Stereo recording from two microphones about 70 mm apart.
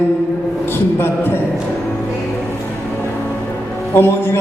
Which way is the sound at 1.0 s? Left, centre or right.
Left.